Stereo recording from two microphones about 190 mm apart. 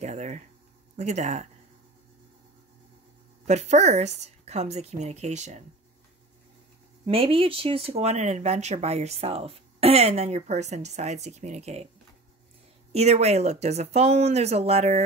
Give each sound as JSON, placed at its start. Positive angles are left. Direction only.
{"t": 0.0, "sound": "speech", "side_deg": -40}
{"t": 3.4, "sound": "speech", "side_deg": -35}
{"t": 7.1, "sound": "speech", "side_deg": -30}
{"t": 12.9, "sound": "speech", "side_deg": -35}